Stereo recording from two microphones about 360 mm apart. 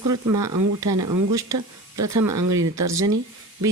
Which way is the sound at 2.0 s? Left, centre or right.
Right.